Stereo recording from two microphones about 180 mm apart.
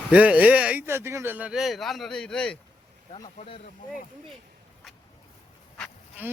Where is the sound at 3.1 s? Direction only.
30° left (ahead or behind).